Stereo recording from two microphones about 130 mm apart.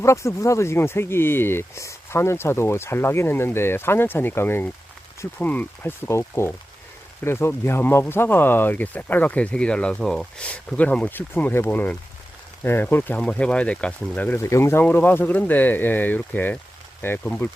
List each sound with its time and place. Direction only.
0.0 s speech: 20° left (ahead or behind); by 14.3 s 5° left (ahead or behind)
14.3 s speech: 20° left (ahead or behind)